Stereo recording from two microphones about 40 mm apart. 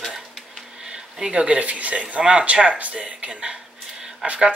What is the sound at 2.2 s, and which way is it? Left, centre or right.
A woman's voice, centre.